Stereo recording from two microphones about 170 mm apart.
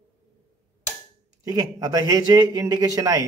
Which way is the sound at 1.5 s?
20° right (ahead or behind).